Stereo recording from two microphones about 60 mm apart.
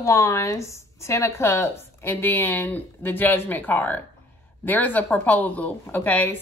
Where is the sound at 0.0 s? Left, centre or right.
Left.